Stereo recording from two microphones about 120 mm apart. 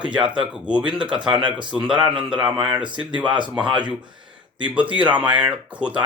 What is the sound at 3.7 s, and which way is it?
Speech, 40° right (ahead or behind).